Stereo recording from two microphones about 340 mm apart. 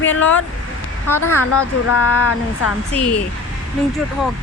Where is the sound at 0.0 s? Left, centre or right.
Left.